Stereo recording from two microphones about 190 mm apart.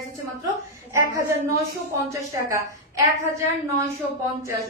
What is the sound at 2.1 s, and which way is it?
A woman's voice, 15° right (ahead or behind).